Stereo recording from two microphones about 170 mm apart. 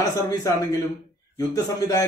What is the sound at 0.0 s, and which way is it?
A man's voice, 20° left (ahead or behind).